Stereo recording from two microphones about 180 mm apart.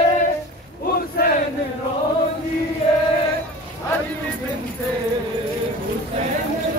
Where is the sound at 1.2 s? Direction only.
60° left (ahead or behind).